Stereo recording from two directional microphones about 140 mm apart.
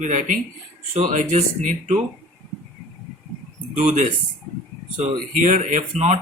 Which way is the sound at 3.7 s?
65° right (ahead or behind).